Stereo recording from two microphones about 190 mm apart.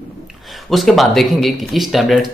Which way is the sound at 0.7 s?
Centre (ahead or behind).